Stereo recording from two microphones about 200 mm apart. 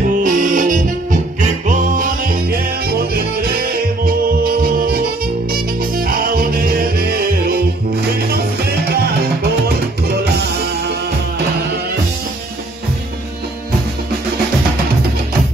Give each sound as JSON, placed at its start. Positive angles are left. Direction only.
{"t": 0.2, "sound": "music", "side_deg": -40}